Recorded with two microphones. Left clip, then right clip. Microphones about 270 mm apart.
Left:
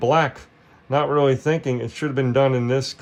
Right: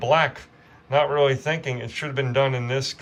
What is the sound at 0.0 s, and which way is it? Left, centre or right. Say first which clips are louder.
Speech: left 1 dB; centre.